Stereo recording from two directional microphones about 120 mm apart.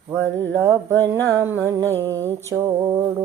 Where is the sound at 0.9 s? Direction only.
20° left (ahead or behind).